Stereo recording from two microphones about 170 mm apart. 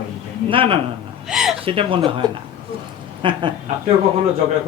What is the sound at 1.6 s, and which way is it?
Speech, 35° right (ahead or behind).